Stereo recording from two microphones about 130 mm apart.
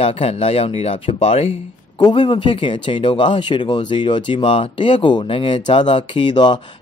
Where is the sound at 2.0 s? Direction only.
35° left (ahead or behind).